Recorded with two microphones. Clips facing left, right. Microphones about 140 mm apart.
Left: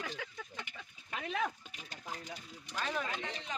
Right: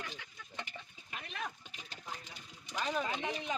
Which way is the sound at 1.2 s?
90° left.